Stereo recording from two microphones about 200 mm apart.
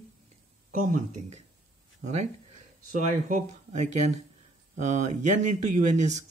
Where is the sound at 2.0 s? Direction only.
35° right (ahead or behind).